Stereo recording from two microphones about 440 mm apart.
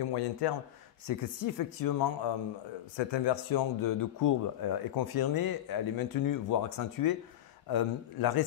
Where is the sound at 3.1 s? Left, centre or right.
Left.